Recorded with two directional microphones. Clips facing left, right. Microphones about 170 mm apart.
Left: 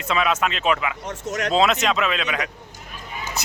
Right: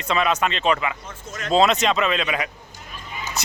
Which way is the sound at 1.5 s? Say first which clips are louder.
Right 2 dB; centre (ahead or behind).